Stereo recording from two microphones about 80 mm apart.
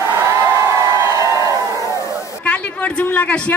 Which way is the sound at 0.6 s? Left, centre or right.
Right.